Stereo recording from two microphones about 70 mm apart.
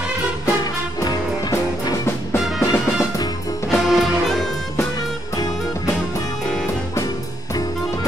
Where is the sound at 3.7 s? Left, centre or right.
Centre.